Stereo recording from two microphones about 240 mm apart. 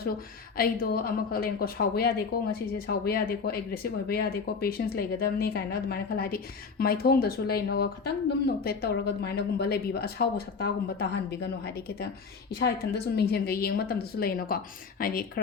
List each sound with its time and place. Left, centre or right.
0.5 s a woman's voice: left